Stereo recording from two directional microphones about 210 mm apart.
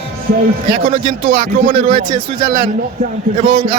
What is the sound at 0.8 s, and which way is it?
Speech, 25° right (ahead or behind).